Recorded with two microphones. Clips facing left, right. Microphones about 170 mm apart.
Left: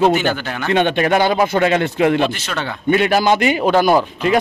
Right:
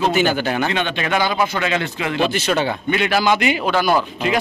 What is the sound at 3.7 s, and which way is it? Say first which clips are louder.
Speech: left 5 dB; 20° left (ahead or behind).